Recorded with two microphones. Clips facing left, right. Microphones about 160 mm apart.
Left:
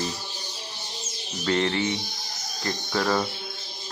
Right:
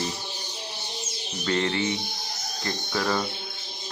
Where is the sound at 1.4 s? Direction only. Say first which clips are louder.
Left 2 dB; 25° left (ahead or behind).